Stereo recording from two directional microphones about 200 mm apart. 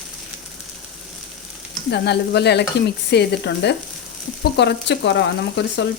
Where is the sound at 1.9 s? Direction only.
55° left (ahead or behind).